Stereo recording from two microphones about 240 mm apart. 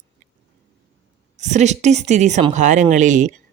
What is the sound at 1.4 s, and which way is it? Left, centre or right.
Speech, right.